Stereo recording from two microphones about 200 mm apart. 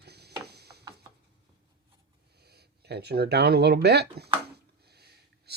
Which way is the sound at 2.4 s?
55° right (ahead or behind).